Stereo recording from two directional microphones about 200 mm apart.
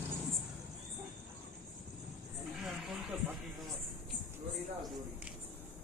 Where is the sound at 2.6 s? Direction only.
Centre (ahead or behind).